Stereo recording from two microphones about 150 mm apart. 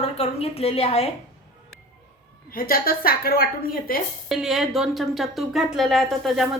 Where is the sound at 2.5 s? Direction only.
75° left (ahead or behind).